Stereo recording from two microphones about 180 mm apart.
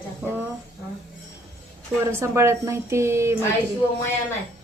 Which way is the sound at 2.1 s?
15° right (ahead or behind).